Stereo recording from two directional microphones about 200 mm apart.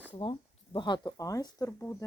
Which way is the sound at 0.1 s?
25° left (ahead or behind).